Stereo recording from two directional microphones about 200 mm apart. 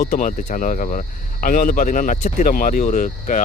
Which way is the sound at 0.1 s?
40° left (ahead or behind).